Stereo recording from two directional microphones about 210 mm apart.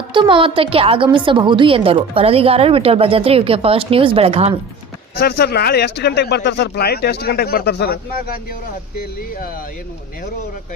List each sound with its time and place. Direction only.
0.1 s a woman's voice: 25° right (ahead or behind)
5.2 s speech: 50° left (ahead or behind)